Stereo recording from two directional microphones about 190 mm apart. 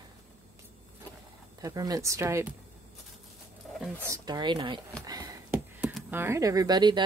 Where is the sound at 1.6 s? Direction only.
20° right (ahead or behind).